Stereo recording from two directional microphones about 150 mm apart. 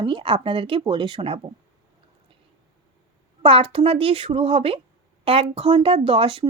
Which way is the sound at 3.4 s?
35° right (ahead or behind).